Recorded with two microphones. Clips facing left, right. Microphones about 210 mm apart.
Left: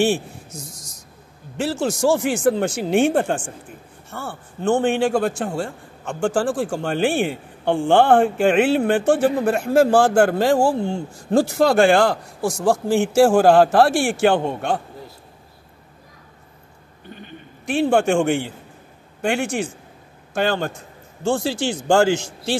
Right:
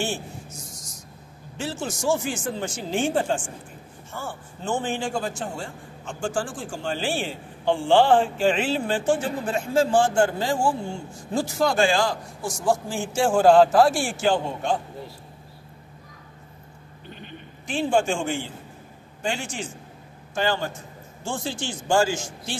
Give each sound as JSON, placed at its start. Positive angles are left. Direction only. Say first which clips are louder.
{"t": 1.6, "sound": "a man's voice", "louder": "left 9 dB", "side_deg": 65}
{"t": 17.6, "sound": "a man's voice", "louder": "left 5 dB", "side_deg": 60}
{"t": 21.2, "sound": "a man's voice", "louder": "left 9 dB", "side_deg": 70}